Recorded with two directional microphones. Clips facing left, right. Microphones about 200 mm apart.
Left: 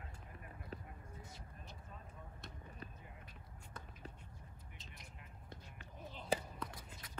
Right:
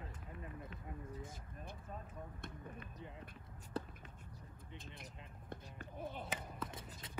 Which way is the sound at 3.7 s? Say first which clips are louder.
Right 13 dB; 35° right (ahead or behind).